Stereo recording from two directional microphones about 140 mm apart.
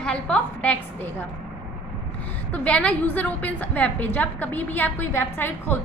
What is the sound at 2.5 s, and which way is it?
A woman's voice, 10° left (ahead or behind).